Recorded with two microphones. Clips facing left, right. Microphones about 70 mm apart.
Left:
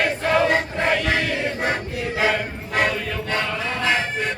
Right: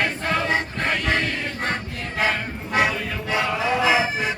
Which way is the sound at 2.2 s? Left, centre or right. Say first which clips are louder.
Left 1 dB; centre.